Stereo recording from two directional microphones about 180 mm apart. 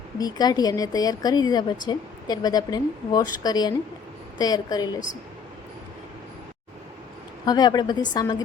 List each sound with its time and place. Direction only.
0.2 s a woman's voice: 20° left (ahead or behind)
7.4 s a woman's voice: 20° left (ahead or behind)